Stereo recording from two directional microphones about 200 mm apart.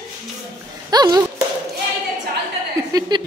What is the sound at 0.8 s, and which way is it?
Speech, 20° right (ahead or behind).